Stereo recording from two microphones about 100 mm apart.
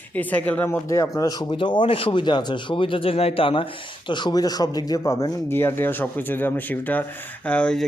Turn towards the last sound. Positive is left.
turn(degrees=10)  # may be behind; listen again after turning